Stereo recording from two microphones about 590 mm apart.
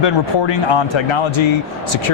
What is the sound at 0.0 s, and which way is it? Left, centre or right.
Speech, left.